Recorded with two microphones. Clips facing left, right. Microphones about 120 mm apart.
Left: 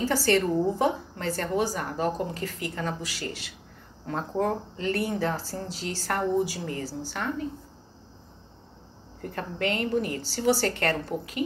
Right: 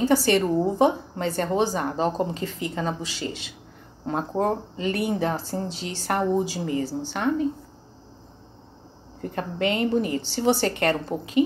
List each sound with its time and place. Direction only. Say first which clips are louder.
0.0 s a woman's voice: right 4 dB; 20° right (ahead or behind)
9.2 s a woman's voice: right 4 dB; 20° right (ahead or behind)